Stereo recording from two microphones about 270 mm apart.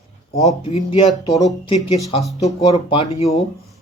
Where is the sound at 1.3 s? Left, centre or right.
Centre.